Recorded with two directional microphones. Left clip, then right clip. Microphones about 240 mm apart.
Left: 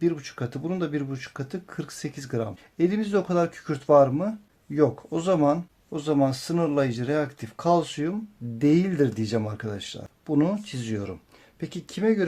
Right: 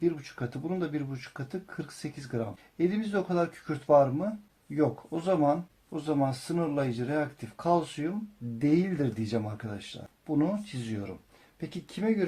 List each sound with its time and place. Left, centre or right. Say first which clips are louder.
0.0 s speech: left 4 dB; left